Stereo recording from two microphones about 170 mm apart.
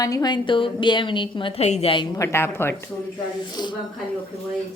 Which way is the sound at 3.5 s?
25° left (ahead or behind).